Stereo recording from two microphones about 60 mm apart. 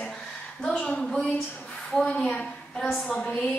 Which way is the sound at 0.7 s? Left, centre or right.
Left.